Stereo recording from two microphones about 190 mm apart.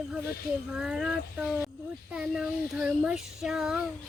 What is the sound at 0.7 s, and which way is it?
Speech, 5° right (ahead or behind).